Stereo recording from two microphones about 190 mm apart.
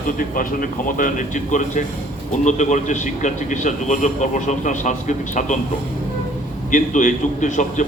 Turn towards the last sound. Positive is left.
turn(degrees=40)  # may be behind; listen again after turning